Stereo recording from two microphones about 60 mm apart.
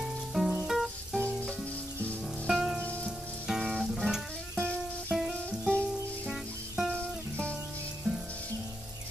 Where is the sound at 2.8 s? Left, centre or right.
Left.